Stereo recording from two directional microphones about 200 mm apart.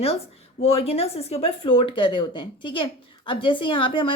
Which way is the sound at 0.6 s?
30° left (ahead or behind).